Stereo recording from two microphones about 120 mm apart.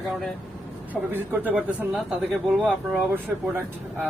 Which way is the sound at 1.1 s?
15° right (ahead or behind).